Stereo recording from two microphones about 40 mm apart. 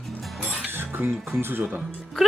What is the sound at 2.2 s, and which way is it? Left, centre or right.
Speech, centre.